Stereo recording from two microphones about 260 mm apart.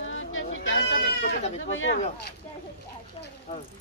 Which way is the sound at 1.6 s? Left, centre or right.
Left.